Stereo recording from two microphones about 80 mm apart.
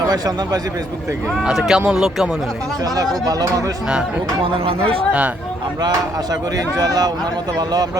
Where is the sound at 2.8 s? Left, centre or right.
Right.